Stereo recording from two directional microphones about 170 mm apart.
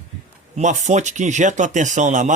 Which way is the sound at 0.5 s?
45° right (ahead or behind).